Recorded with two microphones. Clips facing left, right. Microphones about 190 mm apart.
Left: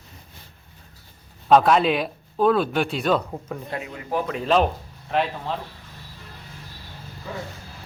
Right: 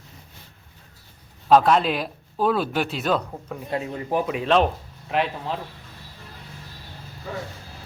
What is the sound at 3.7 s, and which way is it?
Speech, 35° right (ahead or behind).